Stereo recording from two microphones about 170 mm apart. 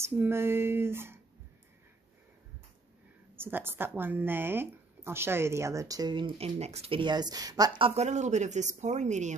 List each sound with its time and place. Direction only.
0.0 s speech: 15° right (ahead or behind)
3.3 s speech: 10° right (ahead or behind); by 9.3 s 45° right (ahead or behind)